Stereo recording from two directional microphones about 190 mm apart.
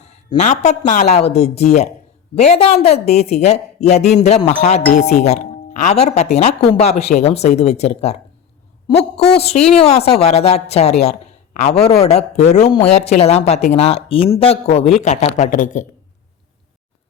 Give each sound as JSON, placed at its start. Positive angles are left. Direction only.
{"t": 0.3, "sound": "speech", "side_deg": 35}
{"t": 9.4, "sound": "speech", "side_deg": 35}